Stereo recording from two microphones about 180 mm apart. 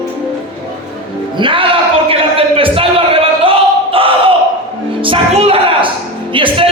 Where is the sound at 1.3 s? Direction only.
30° right (ahead or behind).